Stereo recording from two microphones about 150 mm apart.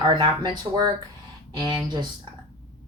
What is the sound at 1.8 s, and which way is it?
Speech, 30° right (ahead or behind).